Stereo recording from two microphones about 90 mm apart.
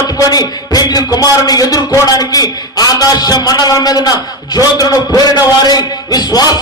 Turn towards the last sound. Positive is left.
turn(degrees=45)  # may be behind; listen again after turning